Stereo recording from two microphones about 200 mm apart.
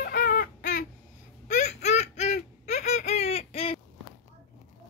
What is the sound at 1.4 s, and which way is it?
Baby laughter, 35° left (ahead or behind).